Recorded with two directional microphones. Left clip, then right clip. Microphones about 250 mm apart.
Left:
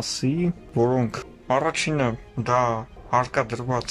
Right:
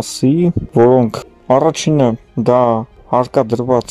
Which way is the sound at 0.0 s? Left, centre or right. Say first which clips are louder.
Right 11 dB; right.